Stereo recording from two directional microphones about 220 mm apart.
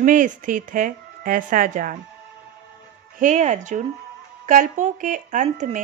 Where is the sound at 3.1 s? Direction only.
35° right (ahead or behind).